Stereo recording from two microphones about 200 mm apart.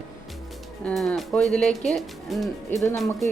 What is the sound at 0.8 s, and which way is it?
Speech, 5° left (ahead or behind).